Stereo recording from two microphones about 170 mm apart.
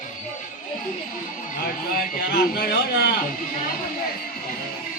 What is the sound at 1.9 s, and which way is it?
A man's voice, 60° left (ahead or behind).